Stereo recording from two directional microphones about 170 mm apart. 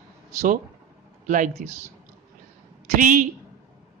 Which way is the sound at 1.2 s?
50° right (ahead or behind).